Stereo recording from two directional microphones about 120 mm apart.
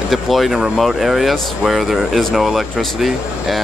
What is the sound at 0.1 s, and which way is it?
Speech, centre (ahead or behind).